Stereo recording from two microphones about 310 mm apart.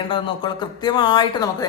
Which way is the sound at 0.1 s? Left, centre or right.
Centre.